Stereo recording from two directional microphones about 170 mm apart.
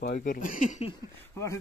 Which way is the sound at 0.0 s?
50° left (ahead or behind).